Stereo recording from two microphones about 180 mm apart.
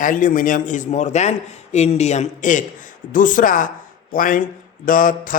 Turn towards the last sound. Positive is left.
turn(degrees=50)  # may be behind; listen again after turning